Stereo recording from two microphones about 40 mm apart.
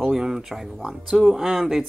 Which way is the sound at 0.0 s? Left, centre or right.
Centre.